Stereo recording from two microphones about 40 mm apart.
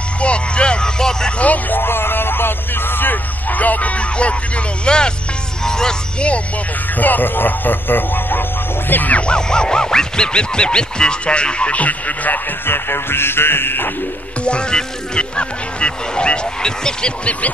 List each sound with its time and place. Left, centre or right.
0.2 s vehicle: left
1.4 s speech: left
1.8 s speech: left
4.8 s a sound: left
5.6 s speech: centre
7.0 s speech: left
9.1 s a sound: left
12.6 s music: left
14.4 s a sound: left
17.2 s speech: left